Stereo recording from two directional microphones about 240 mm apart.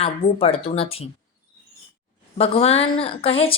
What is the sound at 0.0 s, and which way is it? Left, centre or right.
A woman's voice, left.